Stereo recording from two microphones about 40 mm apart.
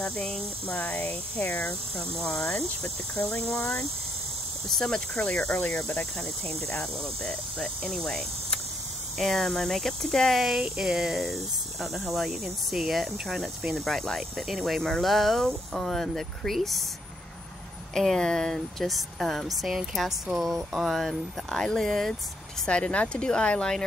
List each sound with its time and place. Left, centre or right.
0.0 s speech: centre
0.7 s speech: left
2.1 s cricket: centre; by 5.8 s left
6.1 s cricket: centre
10.4 s speech: centre
13.7 s cricket: centre
14.6 s speech: centre
17.9 s speech: centre
21.6 s cricket: centre
22.7 s speech: left